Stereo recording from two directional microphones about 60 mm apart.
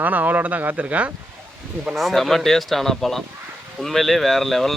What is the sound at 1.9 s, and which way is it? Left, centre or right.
Speech, centre.